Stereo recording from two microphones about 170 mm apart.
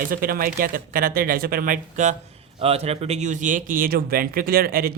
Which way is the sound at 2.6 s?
35° right (ahead or behind).